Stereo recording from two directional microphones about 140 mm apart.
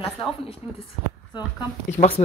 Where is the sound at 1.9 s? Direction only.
45° left (ahead or behind).